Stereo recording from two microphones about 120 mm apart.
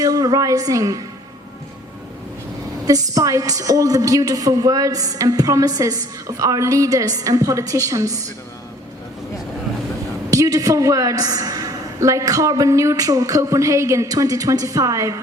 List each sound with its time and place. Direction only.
0.0 s a woman's voice: 30° right (ahead or behind)
2.8 s a woman's voice: 30° right (ahead or behind)
10.3 s a woman's voice: 30° right (ahead or behind)